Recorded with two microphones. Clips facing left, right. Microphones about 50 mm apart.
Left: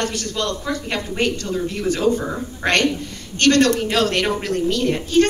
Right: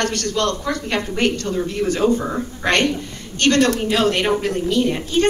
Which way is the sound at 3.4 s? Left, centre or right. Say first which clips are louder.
Left 1 dB; right.